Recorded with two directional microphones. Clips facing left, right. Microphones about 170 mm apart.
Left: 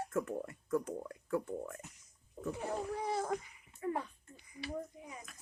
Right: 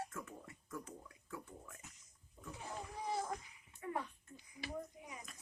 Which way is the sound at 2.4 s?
70° left (ahead or behind).